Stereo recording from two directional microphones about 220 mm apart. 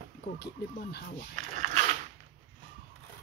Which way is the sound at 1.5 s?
35° right (ahead or behind).